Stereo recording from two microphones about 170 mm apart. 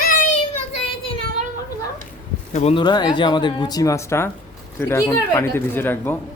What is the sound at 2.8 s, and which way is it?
Speech, 25° left (ahead or behind).